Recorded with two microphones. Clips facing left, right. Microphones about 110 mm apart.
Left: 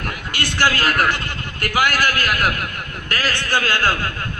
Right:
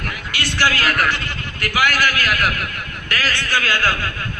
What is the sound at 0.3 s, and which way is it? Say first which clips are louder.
Speech: even; 45° left (ahead or behind).